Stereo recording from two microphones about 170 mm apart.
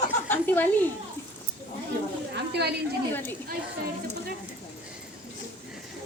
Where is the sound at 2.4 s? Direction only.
75° right (ahead or behind).